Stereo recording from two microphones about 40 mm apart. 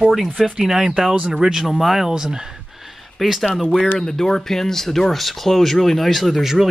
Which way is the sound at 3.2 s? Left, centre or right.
Centre.